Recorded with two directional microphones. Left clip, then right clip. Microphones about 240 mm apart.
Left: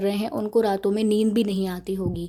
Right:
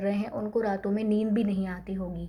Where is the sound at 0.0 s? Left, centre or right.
Left.